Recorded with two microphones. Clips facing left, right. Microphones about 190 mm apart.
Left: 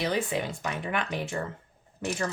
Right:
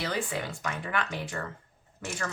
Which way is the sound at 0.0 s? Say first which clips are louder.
Left 4 dB; 20° left (ahead or behind).